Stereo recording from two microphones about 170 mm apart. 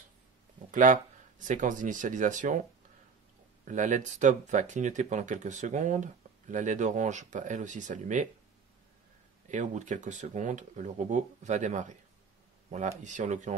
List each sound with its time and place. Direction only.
0.7 s speech: 50° right (ahead or behind)
3.6 s speech: 45° right (ahead or behind)
9.5 s speech: 45° right (ahead or behind)